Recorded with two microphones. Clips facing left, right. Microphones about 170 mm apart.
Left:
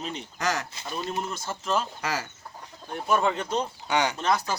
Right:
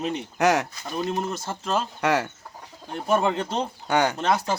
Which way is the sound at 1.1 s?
25° right (ahead or behind).